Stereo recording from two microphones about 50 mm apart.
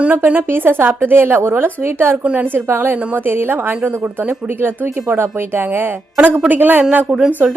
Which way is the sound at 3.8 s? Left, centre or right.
Right.